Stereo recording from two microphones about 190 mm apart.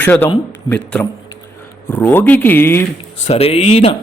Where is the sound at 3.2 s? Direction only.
35° left (ahead or behind).